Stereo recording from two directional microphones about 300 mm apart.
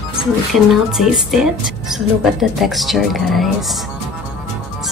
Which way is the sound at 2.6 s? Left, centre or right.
Centre.